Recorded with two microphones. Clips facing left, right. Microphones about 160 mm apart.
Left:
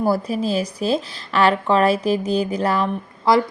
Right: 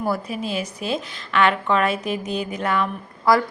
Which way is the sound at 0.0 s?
35° left (ahead or behind).